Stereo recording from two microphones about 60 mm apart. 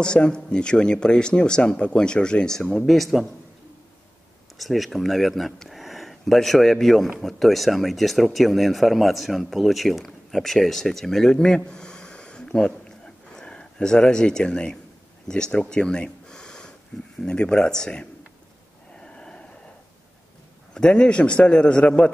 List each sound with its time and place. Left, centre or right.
0.0 s speech: centre
4.6 s speech: centre
15.2 s a sound: centre
17.2 s speech: centre
18.9 s snort: centre
20.7 s a man's voice: centre